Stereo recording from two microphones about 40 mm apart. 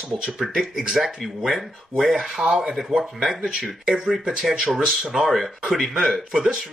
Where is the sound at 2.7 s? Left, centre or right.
Centre.